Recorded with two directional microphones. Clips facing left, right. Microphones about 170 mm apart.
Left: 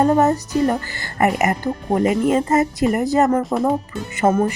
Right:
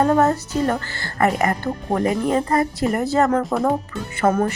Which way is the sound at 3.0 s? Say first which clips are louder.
Left 1 dB; 15° left (ahead or behind).